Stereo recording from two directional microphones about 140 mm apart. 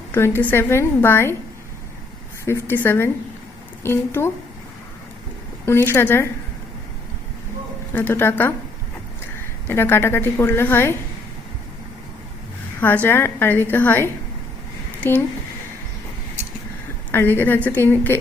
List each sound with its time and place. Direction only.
0.1 s a woman's voice: 15° left (ahead or behind)
2.4 s a woman's voice: 15° left (ahead or behind)
5.6 s a woman's voice: 15° left (ahead or behind)
7.9 s a woman's voice: 15° left (ahead or behind)
9.6 s a woman's voice: 15° left (ahead or behind)
12.8 s a woman's voice: 15° left (ahead or behind)
17.1 s a woman's voice: 15° left (ahead or behind)